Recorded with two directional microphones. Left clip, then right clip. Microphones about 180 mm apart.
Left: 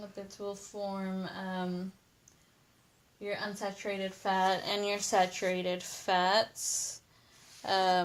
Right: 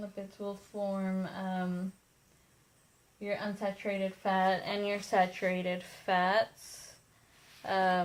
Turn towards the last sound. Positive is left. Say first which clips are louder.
# left 1 dB
turn(degrees=35)  # may be behind; listen again after turning